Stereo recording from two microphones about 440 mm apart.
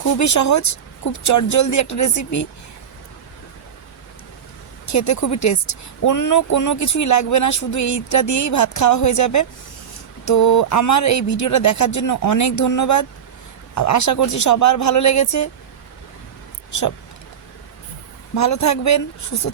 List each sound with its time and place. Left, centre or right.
0.0 s a woman's voice: left
4.9 s a woman's voice: left
18.3 s a woman's voice: left